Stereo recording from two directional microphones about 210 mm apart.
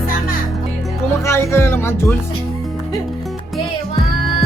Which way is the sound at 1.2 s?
10° left (ahead or behind).